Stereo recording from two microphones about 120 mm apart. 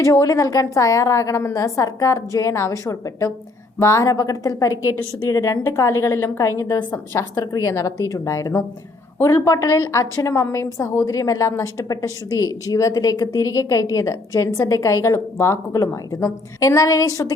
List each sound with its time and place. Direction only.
0.0 s a woman's voice: 25° left (ahead or behind)